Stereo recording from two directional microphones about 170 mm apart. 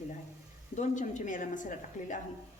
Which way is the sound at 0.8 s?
45° left (ahead or behind).